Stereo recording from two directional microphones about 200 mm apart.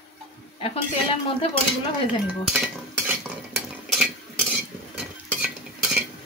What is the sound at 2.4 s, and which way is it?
Dishes, centre (ahead or behind).